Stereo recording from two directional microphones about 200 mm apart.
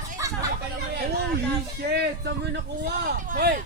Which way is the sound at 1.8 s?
55° right (ahead or behind).